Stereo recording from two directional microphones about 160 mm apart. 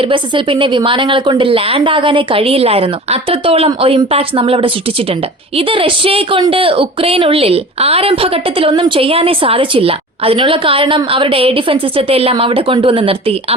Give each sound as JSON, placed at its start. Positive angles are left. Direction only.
{"t": 0.0, "sound": "speech", "side_deg": -30}